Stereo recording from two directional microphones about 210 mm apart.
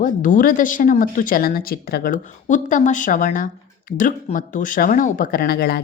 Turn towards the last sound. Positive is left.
turn(degrees=50)  # may be behind; listen again after turning